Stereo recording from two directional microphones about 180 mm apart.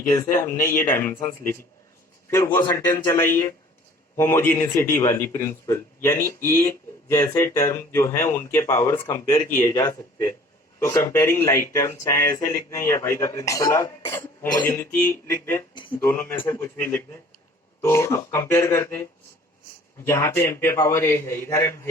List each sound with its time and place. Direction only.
0.4 s a man's voice: 15° left (ahead or behind)
20.1 s a man's voice: 15° left (ahead or behind)